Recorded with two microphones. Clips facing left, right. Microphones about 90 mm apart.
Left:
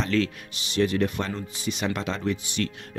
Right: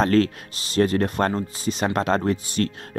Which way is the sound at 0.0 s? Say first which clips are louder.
Right 6 dB; 45° right (ahead or behind).